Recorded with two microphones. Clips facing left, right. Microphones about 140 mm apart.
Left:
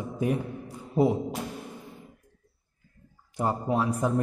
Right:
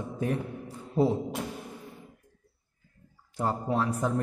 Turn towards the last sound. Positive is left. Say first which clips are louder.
# left 2 dB
turn(degrees=15)  # may be behind; listen again after turning